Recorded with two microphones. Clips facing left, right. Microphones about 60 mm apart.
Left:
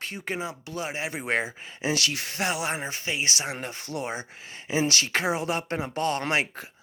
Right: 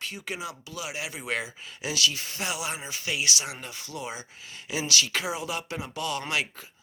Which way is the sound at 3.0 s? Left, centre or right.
Left.